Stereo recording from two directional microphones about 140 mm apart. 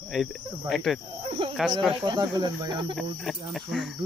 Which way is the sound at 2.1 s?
30° right (ahead or behind).